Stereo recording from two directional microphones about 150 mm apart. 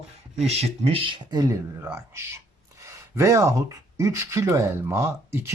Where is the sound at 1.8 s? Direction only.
15° right (ahead or behind).